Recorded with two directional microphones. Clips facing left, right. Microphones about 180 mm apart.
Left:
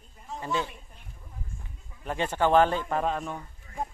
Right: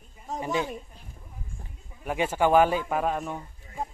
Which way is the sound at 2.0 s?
10° right (ahead or behind).